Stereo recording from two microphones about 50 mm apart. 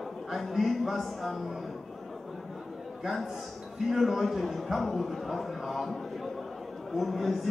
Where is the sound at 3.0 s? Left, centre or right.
Centre.